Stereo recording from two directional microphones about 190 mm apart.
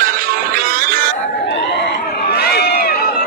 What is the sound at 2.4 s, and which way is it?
Run, 55° left (ahead or behind).